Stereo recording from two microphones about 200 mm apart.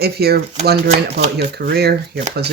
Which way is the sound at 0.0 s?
50° right (ahead or behind).